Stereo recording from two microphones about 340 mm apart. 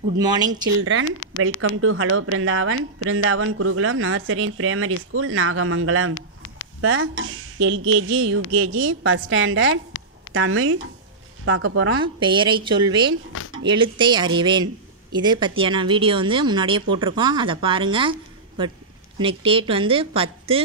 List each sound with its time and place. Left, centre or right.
0.2 s speech: centre
1.4 s a woman's voice: right
12.0 s speech: centre
19.1 s speech: centre